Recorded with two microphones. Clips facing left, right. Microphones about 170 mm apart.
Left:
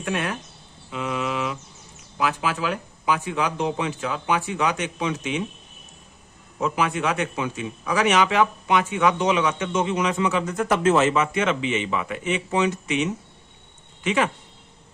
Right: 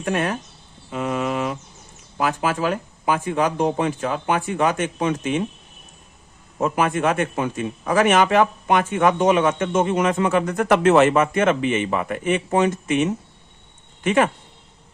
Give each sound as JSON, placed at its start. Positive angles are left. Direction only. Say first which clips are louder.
{"t": 0.0, "sound": "a man's voice", "louder": "right 4 dB", "side_deg": -45}
{"t": 6.6, "sound": "a man's voice", "louder": "right 4 dB", "side_deg": -50}